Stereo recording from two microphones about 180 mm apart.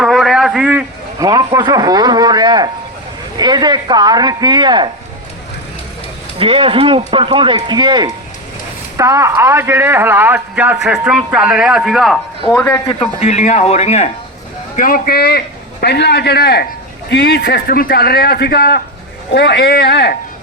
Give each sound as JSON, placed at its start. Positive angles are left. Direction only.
{"t": 0.0, "sound": "a sound", "side_deg": 0}
{"t": 1.2, "sound": "speech", "side_deg": -20}
{"t": 6.4, "sound": "a man's voice", "side_deg": -30}
{"t": 12.5, "sound": "a man's voice", "side_deg": 10}
{"t": 13.0, "sound": "speech", "side_deg": 40}
{"t": 14.8, "sound": "a man's voice", "side_deg": 50}